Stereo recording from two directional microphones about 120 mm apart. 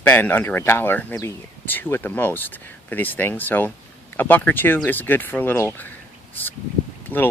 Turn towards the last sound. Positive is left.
turn(degrees=15)  # may be behind; listen again after turning